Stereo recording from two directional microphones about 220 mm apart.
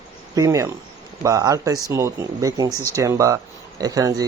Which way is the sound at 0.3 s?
15° right (ahead or behind).